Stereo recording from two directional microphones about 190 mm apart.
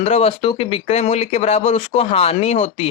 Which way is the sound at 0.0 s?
35° left (ahead or behind).